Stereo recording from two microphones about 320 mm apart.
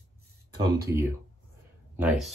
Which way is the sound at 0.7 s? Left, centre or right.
Centre.